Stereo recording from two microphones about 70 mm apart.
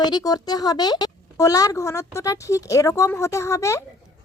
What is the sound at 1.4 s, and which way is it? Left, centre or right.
Speech, left.